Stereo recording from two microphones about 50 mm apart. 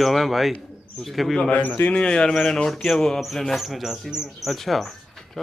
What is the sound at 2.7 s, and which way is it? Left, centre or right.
Speech, centre.